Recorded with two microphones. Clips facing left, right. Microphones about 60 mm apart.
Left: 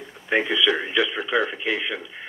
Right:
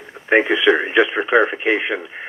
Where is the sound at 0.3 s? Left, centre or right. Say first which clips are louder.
Right 7 dB; right.